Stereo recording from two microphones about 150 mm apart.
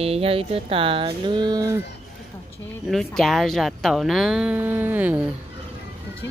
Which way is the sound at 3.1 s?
Centre (ahead or behind).